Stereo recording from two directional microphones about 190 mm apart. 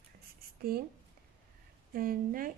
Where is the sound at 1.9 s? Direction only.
50° right (ahead or behind).